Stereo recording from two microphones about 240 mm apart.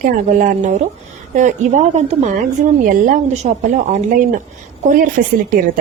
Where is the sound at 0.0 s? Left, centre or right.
Right.